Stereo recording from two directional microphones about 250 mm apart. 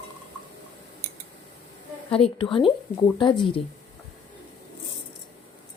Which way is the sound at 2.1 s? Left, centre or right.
Left.